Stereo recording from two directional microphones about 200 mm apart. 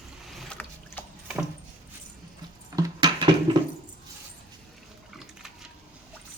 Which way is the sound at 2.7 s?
20° right (ahead or behind).